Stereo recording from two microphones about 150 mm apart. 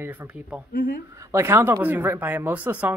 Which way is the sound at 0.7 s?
70° left (ahead or behind).